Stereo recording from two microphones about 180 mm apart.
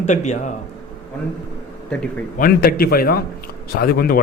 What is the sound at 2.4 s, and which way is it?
A man's voice, 55° left (ahead or behind).